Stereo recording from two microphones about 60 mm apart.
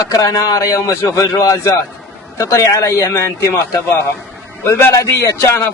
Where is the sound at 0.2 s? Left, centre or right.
Left.